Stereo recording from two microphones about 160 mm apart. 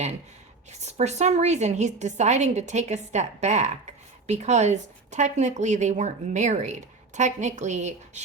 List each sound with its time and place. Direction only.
0.7 s speech: 45° right (ahead or behind)